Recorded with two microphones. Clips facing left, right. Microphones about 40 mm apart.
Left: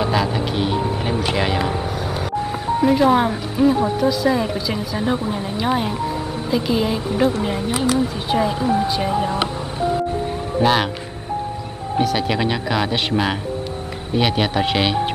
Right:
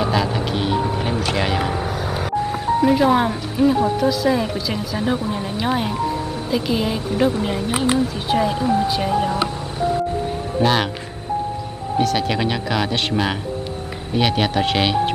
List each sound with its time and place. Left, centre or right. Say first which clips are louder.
0.0 s vehicle: even; centre
2.8 s speech: left 1 dB; centre
7.7 s speech: even; right
8.1 s speech: even; centre
10.6 s speech: left 1 dB; centre
12.0 s speech: even; centre